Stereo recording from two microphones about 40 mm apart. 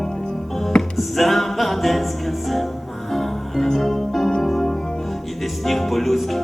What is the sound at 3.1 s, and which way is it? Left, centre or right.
Music, centre.